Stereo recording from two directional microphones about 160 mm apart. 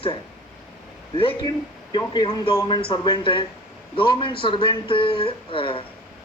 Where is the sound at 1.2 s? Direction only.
30° left (ahead or behind).